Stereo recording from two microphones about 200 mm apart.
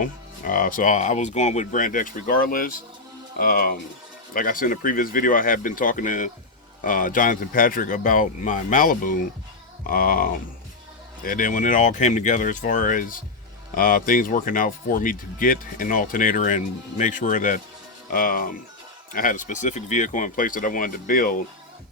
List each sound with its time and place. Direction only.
0.0 s speech: 45° left (ahead or behind)